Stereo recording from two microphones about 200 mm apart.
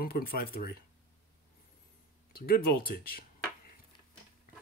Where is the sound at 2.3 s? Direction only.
50° left (ahead or behind).